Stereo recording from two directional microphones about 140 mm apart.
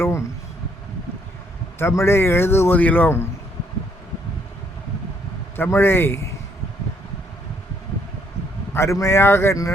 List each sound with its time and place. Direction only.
0.0 s a sound: 20° left (ahead or behind)
1.8 s speech: 20° left (ahead or behind)
5.5 s speech: 15° left (ahead or behind)
8.7 s speech: 20° left (ahead or behind)